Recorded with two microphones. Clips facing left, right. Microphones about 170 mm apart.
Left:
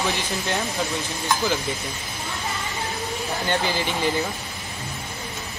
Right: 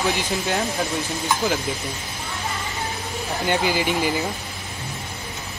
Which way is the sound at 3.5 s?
10° right (ahead or behind).